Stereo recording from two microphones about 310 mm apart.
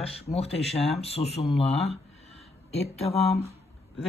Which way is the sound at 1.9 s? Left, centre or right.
Centre.